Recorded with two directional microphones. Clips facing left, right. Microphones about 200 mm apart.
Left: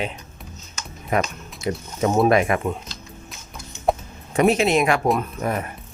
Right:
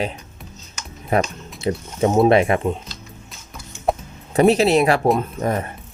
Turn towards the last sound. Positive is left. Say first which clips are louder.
# right 3 dB
turn(degrees=-30)  # may be behind; listen again after turning